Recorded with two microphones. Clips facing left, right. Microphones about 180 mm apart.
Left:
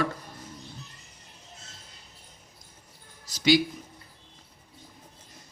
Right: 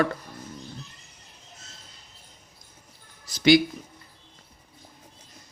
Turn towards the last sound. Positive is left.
turn(degrees=-60)  # may be behind; listen again after turning